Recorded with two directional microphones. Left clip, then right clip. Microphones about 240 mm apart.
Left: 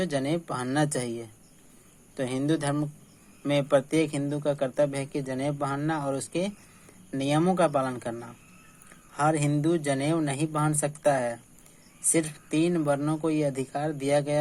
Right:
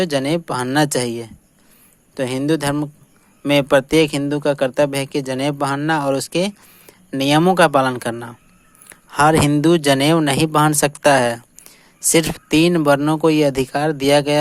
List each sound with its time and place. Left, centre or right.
0.0 s speech: right